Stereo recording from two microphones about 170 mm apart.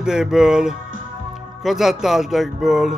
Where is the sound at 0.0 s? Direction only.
5° right (ahead or behind).